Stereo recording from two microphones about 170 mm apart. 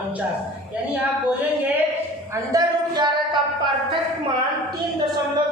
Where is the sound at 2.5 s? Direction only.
25° right (ahead or behind).